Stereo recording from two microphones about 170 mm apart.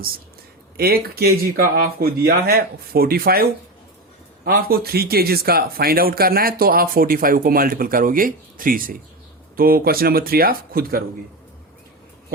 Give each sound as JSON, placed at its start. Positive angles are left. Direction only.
{"t": 0.8, "sound": "speech", "side_deg": -65}
{"t": 4.4, "sound": "speech", "side_deg": -60}